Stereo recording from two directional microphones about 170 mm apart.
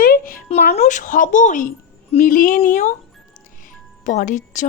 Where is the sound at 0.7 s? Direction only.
40° left (ahead or behind).